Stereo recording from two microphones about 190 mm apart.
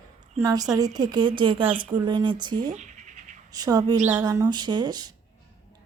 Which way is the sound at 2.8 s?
40° right (ahead or behind).